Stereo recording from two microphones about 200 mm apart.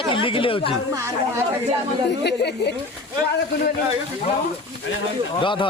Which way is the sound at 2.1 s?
55° left (ahead or behind).